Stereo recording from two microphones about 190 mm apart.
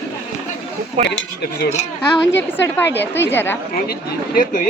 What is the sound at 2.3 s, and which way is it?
Speech, 70° left (ahead or behind).